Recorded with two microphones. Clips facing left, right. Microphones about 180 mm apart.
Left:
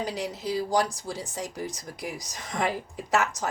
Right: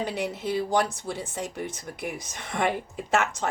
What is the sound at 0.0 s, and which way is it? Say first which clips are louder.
A woman's voice: right 2 dB; 25° right (ahead or behind).